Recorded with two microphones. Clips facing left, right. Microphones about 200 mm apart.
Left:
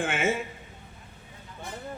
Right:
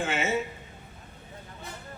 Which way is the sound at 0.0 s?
50° left (ahead or behind).